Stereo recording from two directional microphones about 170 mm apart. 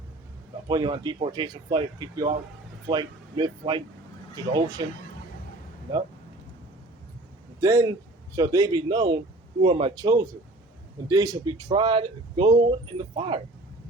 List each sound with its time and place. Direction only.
0.7 s speech: 25° right (ahead or behind)
7.6 s speech: 20° right (ahead or behind)